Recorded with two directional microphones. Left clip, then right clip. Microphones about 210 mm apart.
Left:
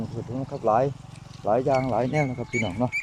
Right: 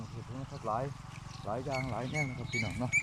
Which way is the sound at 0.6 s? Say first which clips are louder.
Left 14 dB; 50° left (ahead or behind).